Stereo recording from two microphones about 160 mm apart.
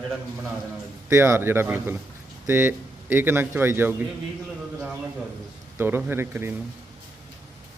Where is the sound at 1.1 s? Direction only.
15° right (ahead or behind).